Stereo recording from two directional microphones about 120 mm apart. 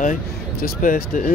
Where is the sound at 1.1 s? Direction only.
90° left.